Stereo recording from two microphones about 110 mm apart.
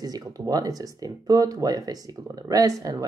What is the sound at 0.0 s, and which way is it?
Speech, 35° right (ahead or behind).